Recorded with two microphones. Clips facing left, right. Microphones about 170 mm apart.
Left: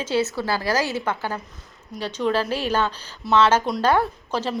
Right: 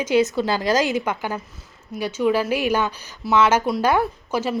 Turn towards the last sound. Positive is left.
turn(degrees=-10)  # may be behind; listen again after turning